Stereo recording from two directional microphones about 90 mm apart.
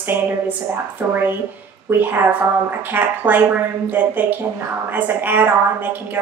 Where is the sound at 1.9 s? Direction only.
25° right (ahead or behind).